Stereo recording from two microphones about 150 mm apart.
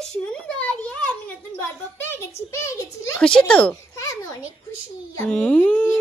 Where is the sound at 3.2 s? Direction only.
5° left (ahead or behind).